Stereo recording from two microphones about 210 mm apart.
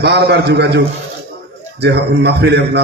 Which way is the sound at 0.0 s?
50° right (ahead or behind).